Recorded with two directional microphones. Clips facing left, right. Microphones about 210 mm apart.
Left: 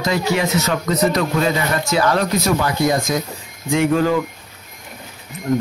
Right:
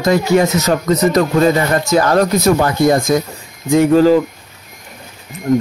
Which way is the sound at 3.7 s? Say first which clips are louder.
Right 7 dB; 35° right (ahead or behind).